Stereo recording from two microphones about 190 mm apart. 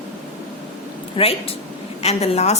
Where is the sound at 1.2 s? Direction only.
30° left (ahead or behind).